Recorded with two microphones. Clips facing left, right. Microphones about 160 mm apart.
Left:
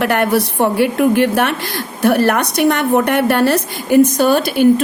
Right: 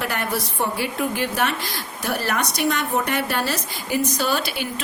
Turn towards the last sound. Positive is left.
turn(degrees=50)  # may be behind; listen again after turning